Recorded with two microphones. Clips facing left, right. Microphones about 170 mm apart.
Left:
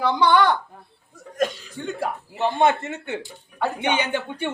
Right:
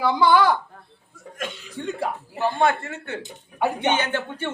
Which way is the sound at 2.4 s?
20° left (ahead or behind).